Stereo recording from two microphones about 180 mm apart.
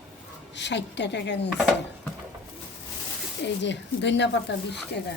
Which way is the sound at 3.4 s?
80° left.